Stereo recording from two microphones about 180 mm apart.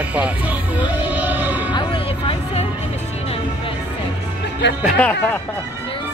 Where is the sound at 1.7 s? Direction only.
25° left (ahead or behind).